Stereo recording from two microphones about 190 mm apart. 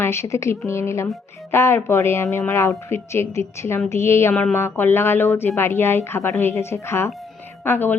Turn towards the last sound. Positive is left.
turn(degrees=10)  # may be behind; listen again after turning